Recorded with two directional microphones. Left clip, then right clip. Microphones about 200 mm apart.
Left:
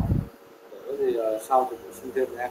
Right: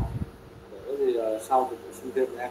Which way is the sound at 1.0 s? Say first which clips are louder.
Left 1 dB; 20° left (ahead or behind).